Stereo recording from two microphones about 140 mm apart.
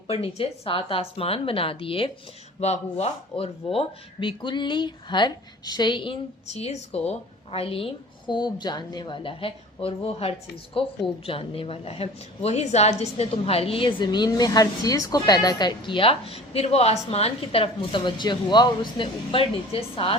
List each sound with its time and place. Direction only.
0.1 s a woman's voice: 45° left (ahead or behind)
6.5 s a woman's voice: 50° left (ahead or behind)
8.3 s a woman's voice: 30° left (ahead or behind)